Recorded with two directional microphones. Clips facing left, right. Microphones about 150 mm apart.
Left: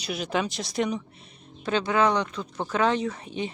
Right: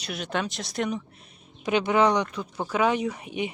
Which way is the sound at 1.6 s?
15° right (ahead or behind).